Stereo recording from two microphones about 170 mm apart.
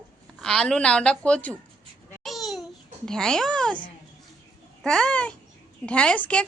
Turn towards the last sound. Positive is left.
turn(degrees=5)  # may be behind; listen again after turning